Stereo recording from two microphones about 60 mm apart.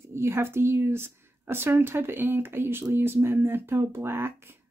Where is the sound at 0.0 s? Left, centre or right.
Right.